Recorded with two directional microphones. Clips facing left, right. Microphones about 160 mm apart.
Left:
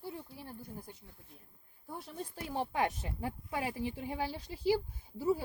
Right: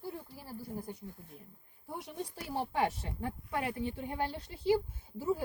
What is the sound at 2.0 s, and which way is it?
Speech, 10° right (ahead or behind).